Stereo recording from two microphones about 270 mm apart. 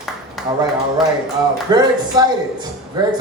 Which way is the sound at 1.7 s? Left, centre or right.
Centre.